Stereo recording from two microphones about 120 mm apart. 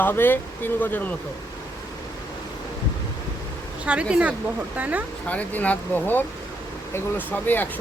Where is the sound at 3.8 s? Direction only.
10° right (ahead or behind).